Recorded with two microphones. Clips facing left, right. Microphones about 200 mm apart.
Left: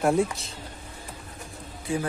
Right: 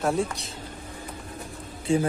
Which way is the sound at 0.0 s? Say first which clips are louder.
Left 3 dB; 5° left (ahead or behind).